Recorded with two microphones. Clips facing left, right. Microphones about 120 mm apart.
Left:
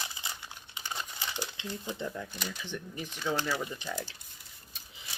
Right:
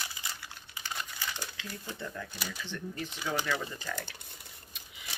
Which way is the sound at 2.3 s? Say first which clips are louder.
Left 1 dB; 5° right (ahead or behind).